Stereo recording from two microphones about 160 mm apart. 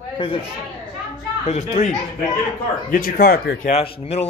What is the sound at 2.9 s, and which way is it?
Speech, 65° left (ahead or behind).